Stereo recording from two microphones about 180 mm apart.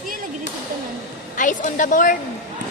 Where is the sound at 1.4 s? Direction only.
45° left (ahead or behind).